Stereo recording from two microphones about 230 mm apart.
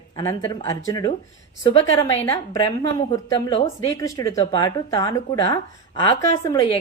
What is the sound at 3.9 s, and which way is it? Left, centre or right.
A woman's voice, centre.